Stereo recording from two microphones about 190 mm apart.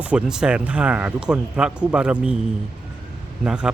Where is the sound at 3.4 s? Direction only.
5° right (ahead or behind).